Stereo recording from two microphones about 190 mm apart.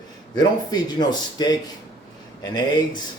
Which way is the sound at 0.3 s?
20° left (ahead or behind).